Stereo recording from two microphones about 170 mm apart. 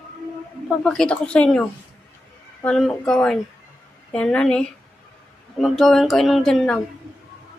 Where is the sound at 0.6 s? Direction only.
5° left (ahead or behind).